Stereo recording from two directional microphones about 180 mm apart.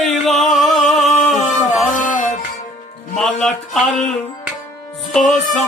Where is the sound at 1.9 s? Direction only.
45° left (ahead or behind).